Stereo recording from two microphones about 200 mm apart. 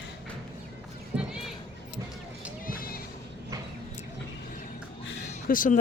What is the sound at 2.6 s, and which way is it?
Music, 45° left (ahead or behind).